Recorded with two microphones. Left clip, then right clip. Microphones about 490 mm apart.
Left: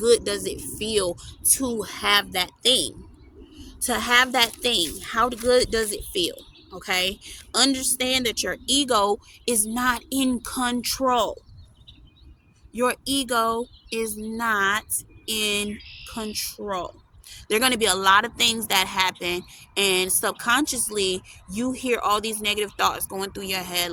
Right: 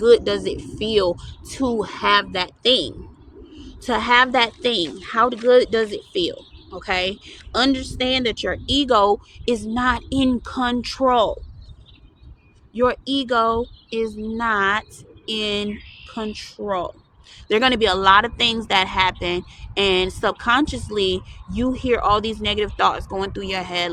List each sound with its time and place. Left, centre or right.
0.0 s a woman's voice: left
12.7 s a woman's voice: left